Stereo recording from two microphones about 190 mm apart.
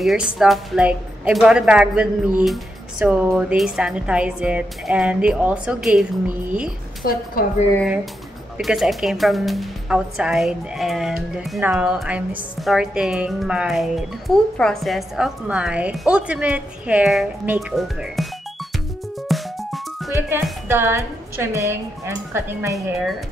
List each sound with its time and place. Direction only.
0.0 s a woman's voice: centre (ahead or behind)
7.1 s a woman's voice: 50° left (ahead or behind)
7.8 s a woman's voice: centre (ahead or behind)
19.2 s music: centre (ahead or behind)
20.2 s music: 10° right (ahead or behind)
20.7 s a woman's voice: 10° right (ahead or behind)